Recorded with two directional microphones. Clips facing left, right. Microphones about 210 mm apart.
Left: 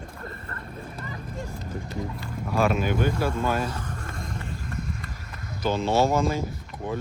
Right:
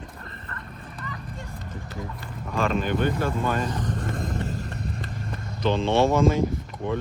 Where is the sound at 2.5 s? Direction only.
10° left (ahead or behind).